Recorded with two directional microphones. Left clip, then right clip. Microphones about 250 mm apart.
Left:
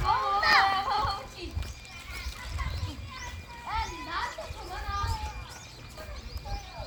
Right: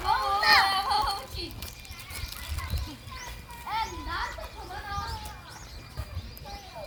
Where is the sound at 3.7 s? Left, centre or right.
Right.